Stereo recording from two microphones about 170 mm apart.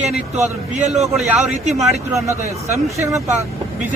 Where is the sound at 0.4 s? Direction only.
40° right (ahead or behind).